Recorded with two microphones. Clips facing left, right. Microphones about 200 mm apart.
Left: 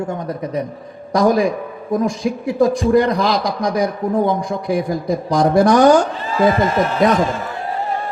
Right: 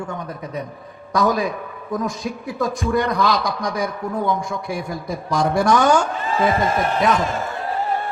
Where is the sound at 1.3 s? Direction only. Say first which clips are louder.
Left 6 dB; 30° left (ahead or behind).